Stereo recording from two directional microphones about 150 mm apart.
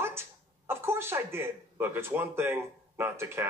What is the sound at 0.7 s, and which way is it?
Speech, 15° right (ahead or behind).